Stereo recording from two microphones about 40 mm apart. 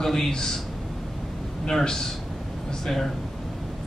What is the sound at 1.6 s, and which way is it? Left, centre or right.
Speech, centre.